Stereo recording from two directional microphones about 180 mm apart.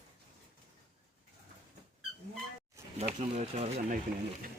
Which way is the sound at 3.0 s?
40° right (ahead or behind).